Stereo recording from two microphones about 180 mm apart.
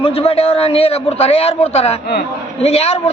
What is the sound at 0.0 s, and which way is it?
A man's voice, 35° left (ahead or behind).